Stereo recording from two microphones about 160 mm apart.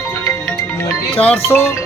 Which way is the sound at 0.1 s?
20° left (ahead or behind).